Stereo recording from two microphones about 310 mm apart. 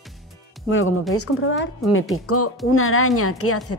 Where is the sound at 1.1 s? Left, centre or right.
Left.